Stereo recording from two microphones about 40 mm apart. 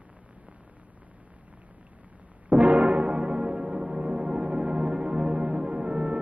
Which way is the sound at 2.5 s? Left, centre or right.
Right.